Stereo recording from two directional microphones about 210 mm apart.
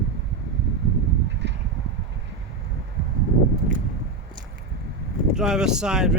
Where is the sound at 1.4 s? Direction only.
55° right (ahead or behind).